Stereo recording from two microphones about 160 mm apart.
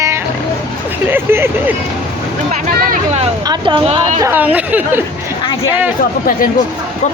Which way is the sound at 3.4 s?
25° right (ahead or behind).